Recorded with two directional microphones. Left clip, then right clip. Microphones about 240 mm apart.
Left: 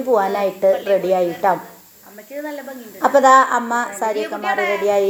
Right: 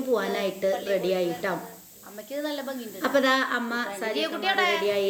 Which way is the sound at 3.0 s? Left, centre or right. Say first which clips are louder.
Left 12 dB; centre.